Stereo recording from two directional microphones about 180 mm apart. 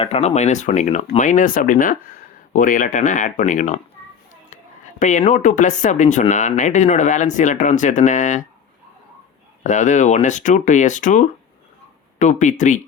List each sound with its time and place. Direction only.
0.0 s speech: 35° left (ahead or behind)
4.9 s speech: 45° left (ahead or behind)
9.6 s speech: 45° left (ahead or behind)